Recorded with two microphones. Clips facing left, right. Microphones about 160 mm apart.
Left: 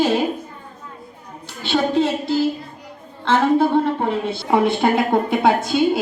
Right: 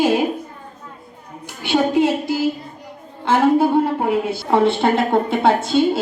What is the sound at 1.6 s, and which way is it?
A woman's voice, 15° right (ahead or behind).